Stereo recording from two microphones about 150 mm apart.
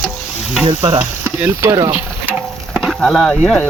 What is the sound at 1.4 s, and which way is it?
Speech, 20° right (ahead or behind).